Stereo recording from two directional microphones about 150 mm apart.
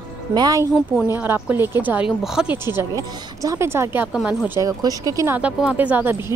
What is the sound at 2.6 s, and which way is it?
Speech, 20° right (ahead or behind).